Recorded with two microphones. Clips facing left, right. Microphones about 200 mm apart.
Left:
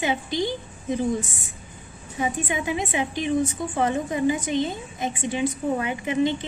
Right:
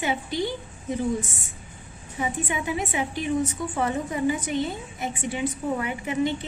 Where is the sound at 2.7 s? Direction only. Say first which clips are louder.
Left 2 dB; 20° left (ahead or behind).